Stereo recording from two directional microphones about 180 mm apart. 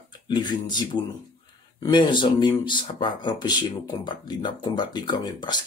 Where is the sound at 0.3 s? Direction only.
25° left (ahead or behind).